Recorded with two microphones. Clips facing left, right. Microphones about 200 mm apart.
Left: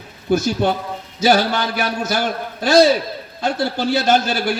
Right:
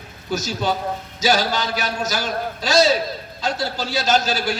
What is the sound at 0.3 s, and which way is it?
A man's voice, 55° left (ahead or behind).